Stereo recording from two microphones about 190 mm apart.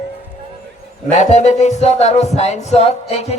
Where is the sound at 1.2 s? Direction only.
35° left (ahead or behind).